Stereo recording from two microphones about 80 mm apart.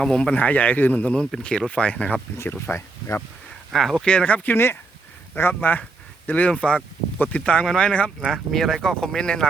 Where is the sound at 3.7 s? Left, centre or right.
Centre.